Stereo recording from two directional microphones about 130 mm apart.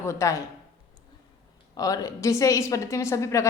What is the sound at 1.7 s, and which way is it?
A woman's voice, 25° left (ahead or behind).